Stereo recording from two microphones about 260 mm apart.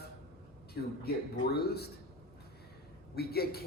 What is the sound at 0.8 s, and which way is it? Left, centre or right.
Speech, left.